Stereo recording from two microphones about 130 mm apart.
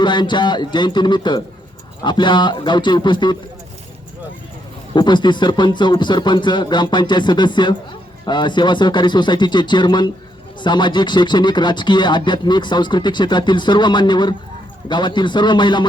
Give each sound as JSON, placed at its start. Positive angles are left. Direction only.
{"t": 0.0, "sound": "speech", "side_deg": 35}
{"t": 4.9, "sound": "speech", "side_deg": 35}